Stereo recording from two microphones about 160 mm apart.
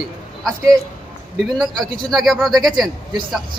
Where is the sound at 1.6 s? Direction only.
Centre (ahead or behind).